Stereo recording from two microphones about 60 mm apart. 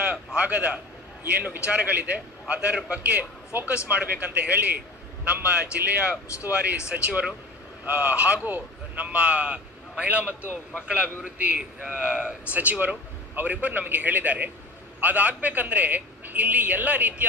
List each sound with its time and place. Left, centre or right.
0.0 s a man's voice: right